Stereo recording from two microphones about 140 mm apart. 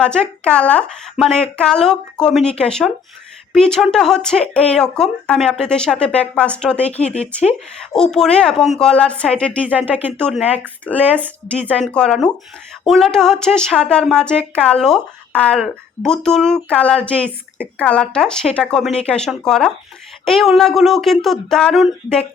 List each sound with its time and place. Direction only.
0.0 s speech: 5° left (ahead or behind)
9.6 s speech: 10° right (ahead or behind)
10.2 s speech: 5° left (ahead or behind)